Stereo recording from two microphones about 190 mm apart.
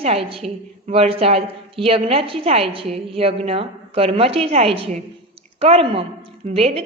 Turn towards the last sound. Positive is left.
turn(degrees=-30)  # may be behind; listen again after turning